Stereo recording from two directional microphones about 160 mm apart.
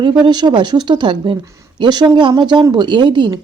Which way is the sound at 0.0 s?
25° right (ahead or behind).